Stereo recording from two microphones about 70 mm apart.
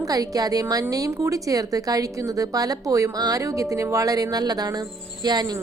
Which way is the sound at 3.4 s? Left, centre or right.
Right.